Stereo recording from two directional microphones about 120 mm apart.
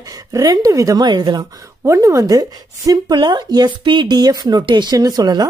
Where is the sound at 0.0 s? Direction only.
30° right (ahead or behind).